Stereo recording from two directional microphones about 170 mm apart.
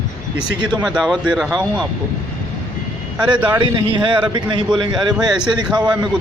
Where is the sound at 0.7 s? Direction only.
5° right (ahead or behind).